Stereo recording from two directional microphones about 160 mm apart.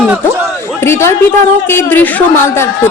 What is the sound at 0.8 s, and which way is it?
A woman's voice, 15° left (ahead or behind).